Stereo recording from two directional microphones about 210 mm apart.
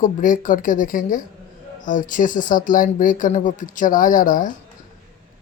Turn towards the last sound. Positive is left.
turn(degrees=40)  # may be behind; listen again after turning